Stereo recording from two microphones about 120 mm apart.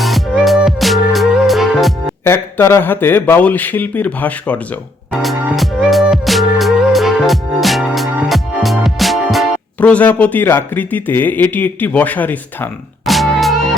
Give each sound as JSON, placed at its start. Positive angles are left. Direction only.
{"t": 0.0, "sound": "music", "side_deg": 0}
{"t": 2.2, "sound": "speech", "side_deg": 20}
{"t": 5.2, "sound": "music", "side_deg": 0}
{"t": 9.8, "sound": "speech", "side_deg": 15}
{"t": 13.1, "sound": "music", "side_deg": 0}